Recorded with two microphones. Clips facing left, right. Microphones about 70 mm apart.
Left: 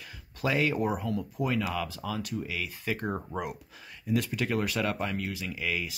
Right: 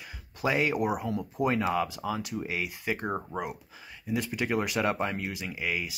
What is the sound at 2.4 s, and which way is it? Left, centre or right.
Speech, right.